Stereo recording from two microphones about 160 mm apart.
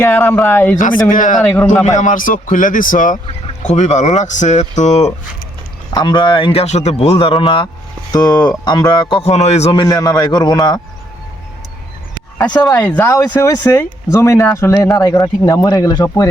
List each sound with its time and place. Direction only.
0.0 s speech: 15° left (ahead or behind)
0.8 s speech: 55° left (ahead or behind)
1.4 s speech: 10° left (ahead or behind)
1.8 s a man's voice: 50° left (ahead or behind)
3.4 s speech: 45° left (ahead or behind)
5.9 s a man's voice: 30° left (ahead or behind)
9.8 s speech: 20° left (ahead or behind)
13.0 s speech: 15° left (ahead or behind)